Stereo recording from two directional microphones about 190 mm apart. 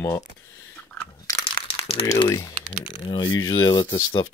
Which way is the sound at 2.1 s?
20° left (ahead or behind).